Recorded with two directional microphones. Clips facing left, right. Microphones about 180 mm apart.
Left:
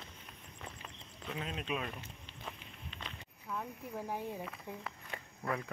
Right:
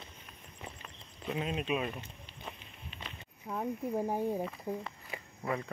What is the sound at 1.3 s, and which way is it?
Speech, 15° right (ahead or behind).